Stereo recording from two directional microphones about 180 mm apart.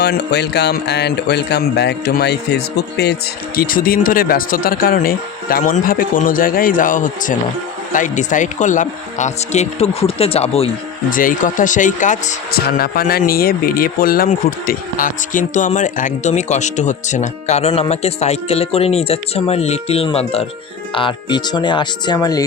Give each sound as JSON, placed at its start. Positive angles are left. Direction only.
{"t": 0.0, "sound": "speech", "side_deg": 65}
{"t": 11.1, "sound": "speech", "side_deg": 50}